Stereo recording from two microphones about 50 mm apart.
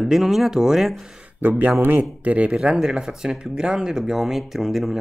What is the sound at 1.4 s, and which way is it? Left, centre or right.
Speech, right.